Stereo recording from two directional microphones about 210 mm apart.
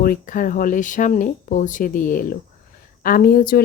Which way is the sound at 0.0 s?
40° left (ahead or behind).